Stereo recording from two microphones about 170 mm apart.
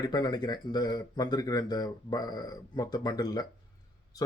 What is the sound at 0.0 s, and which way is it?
Speech, 25° left (ahead or behind).